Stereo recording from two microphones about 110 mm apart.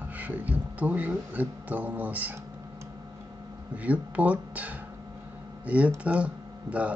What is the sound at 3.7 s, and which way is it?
Speech, 15° right (ahead or behind).